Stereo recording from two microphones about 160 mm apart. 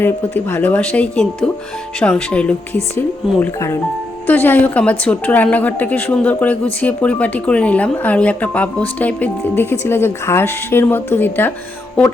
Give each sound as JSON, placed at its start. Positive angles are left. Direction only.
{"t": 0.0, "sound": "speech", "side_deg": 15}